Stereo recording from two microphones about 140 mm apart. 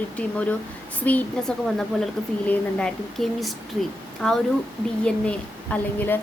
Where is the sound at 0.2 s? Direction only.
10° left (ahead or behind).